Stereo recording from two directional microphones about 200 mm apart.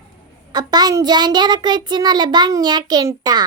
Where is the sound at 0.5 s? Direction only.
20° right (ahead or behind).